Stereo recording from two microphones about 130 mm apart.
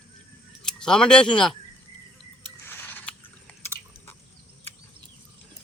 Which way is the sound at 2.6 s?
15° left (ahead or behind).